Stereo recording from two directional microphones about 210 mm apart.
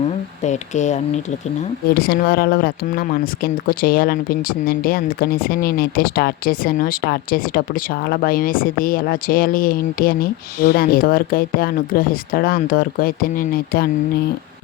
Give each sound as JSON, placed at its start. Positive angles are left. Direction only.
{"t": 0.4, "sound": "speech", "side_deg": 35}
{"t": 2.0, "sound": "speech", "side_deg": 45}